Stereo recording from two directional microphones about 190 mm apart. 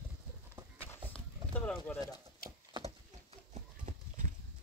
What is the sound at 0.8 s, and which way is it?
Horse, 10° left (ahead or behind).